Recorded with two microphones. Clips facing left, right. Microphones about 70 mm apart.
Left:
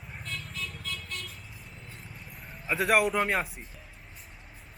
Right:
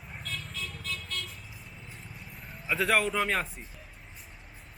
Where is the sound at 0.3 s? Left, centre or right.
Centre.